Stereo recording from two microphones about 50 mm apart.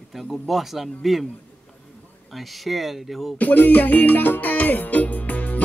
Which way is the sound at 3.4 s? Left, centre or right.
Left.